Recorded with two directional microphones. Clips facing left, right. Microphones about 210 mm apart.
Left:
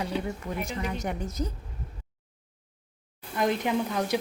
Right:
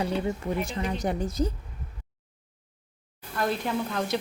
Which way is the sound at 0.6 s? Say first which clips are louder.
Right 2 dB; 30° right (ahead or behind).